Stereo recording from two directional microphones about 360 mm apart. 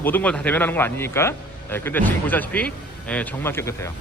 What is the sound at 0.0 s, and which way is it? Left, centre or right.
Speech, centre.